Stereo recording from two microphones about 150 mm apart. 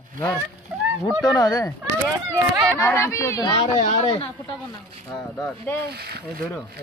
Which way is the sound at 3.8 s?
55° left (ahead or behind).